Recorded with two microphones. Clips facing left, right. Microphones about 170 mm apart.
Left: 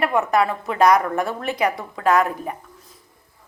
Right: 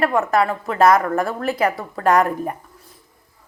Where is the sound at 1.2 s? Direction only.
Centre (ahead or behind).